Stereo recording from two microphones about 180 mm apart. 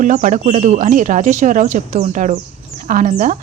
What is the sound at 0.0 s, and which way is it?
Speech, 45° right (ahead or behind).